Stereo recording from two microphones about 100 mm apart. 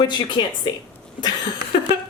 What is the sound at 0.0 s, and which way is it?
Speech, 50° left (ahead or behind).